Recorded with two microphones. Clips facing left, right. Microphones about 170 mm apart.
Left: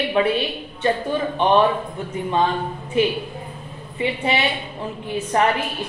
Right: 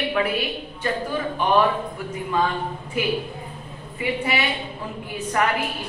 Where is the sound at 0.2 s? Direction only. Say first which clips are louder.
Left 6 dB; 25° left (ahead or behind).